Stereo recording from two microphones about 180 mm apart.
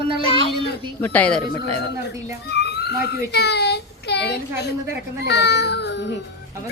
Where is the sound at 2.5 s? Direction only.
70° left (ahead or behind).